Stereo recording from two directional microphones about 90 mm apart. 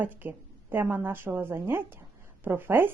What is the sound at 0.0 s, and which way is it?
A woman's voice, 20° right (ahead or behind).